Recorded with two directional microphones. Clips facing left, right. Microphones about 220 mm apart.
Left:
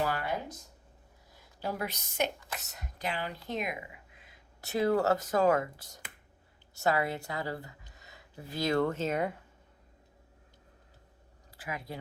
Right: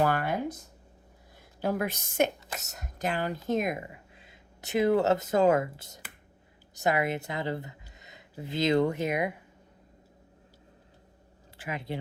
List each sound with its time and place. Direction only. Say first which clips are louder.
0.0 s a sound: right 5 dB; 55° right (ahead or behind)
1.6 s speech: right 6 dB; 50° right (ahead or behind)
4.1 s a woman's voice: right 4 dB; 25° right (ahead or behind)
11.5 s speech: right 4 dB; 25° right (ahead or behind)